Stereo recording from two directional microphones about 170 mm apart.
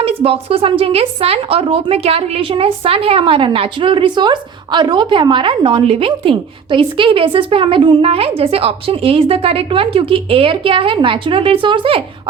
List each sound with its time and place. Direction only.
0.0 s a woman's voice: 35° right (ahead or behind)